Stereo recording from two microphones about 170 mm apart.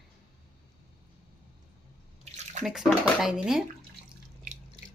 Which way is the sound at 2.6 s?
Centre (ahead or behind).